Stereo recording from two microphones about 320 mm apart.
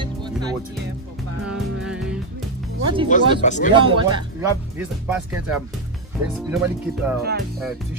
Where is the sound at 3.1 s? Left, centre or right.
Left.